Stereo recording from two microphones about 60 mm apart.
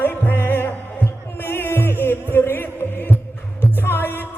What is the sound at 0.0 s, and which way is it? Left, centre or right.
Music, left.